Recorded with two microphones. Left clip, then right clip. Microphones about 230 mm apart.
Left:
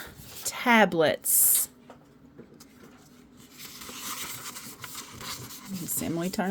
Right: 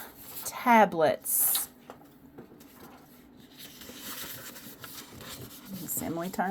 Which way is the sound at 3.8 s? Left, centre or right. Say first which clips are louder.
Left 5 dB; centre.